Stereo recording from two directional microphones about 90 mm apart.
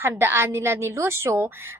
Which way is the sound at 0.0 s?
30° right (ahead or behind).